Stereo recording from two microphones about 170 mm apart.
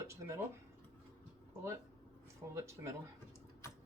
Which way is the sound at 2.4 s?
15° right (ahead or behind).